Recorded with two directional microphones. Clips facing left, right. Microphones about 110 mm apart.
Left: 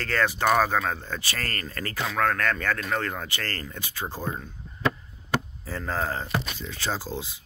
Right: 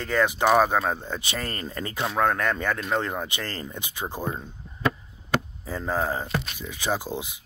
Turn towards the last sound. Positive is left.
turn(degrees=-15)  # may be behind; listen again after turning